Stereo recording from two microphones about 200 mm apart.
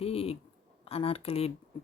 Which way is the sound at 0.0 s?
30° left (ahead or behind).